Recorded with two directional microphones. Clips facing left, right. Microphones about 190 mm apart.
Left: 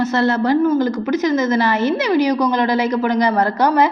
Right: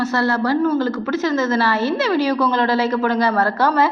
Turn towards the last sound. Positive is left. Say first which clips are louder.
# left 2 dB
turn(degrees=15)  # may be behind; listen again after turning